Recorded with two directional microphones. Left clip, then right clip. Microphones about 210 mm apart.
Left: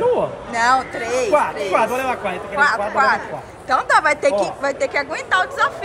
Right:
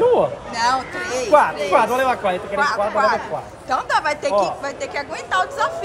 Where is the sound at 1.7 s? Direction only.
45° right (ahead or behind).